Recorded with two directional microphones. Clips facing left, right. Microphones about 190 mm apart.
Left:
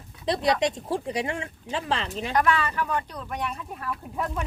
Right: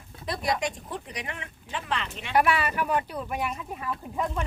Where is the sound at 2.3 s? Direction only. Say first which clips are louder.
Right 1 dB; 10° right (ahead or behind).